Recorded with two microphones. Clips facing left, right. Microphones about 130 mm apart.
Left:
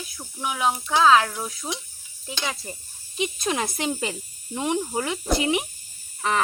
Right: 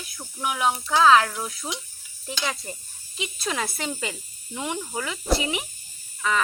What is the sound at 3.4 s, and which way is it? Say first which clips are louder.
Speech: left 1 dB; 20° left (ahead or behind).